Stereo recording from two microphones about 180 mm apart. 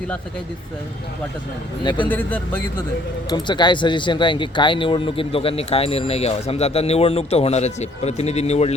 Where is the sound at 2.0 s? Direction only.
10° left (ahead or behind).